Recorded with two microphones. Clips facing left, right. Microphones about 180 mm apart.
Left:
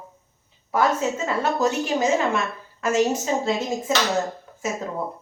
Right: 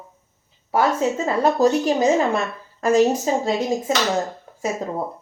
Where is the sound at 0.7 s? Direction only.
35° right (ahead or behind).